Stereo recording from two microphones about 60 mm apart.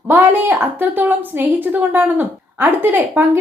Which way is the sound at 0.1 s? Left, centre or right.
Right.